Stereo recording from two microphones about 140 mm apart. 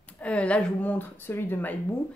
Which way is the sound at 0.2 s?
10° left (ahead or behind).